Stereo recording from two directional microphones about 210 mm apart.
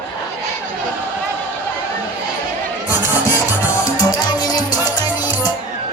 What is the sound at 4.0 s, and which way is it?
Music, 20° left (ahead or behind).